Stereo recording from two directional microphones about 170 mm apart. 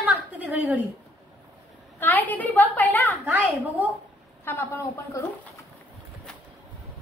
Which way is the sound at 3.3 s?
10° right (ahead or behind).